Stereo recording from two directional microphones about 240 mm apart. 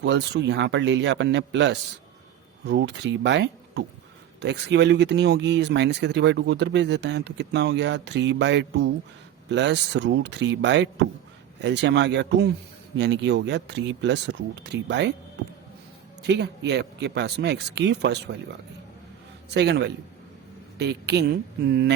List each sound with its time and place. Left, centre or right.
0.0 s speech: right
16.2 s speech: right
19.5 s speech: right